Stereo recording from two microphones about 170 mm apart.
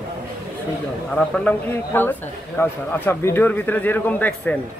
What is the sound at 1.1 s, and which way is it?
Speech, 10° left (ahead or behind).